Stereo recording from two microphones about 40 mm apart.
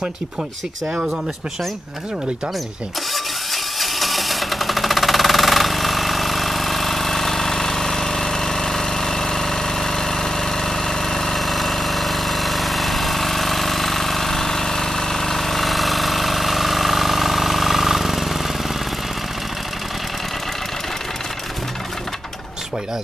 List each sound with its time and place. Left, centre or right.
3.5 s sewing machine: centre